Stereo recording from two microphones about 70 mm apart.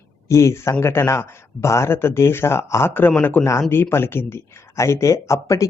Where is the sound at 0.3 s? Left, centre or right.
Left.